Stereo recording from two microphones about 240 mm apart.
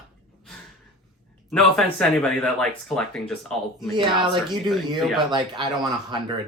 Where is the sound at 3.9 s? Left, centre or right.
Centre.